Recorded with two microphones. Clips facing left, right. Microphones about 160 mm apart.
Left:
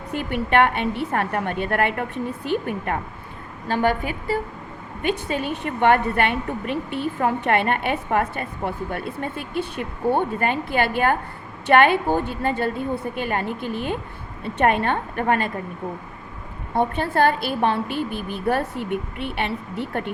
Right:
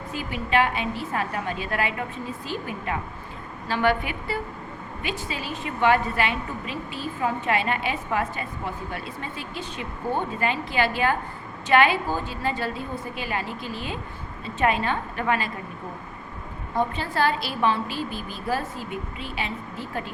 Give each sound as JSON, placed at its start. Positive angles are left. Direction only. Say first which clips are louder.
{"t": 0.1, "sound": "a woman's voice", "louder": "left 4 dB", "side_deg": 60}
{"t": 3.7, "sound": "a woman's voice", "louder": "left 2 dB", "side_deg": 45}
{"t": 5.0, "sound": "a woman's voice", "louder": "left 8 dB", "side_deg": 55}
{"t": 16.7, "sound": "a woman's voice", "louder": "left 4 dB", "side_deg": 55}